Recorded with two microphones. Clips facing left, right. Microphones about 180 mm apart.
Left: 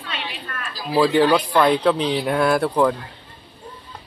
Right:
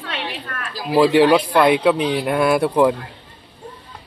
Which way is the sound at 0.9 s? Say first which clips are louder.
Right 3 dB; 10° right (ahead or behind).